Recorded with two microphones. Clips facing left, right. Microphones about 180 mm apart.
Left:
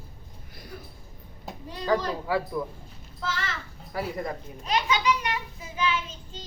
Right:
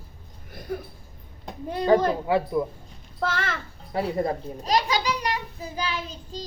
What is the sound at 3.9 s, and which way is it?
A child's voice, 25° right (ahead or behind).